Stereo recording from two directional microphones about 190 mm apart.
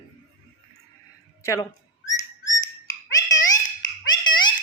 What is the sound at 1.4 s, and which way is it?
Whistling, 15° left (ahead or behind).